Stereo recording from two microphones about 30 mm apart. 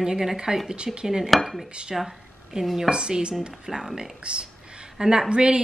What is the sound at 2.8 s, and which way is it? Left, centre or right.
Speech, right.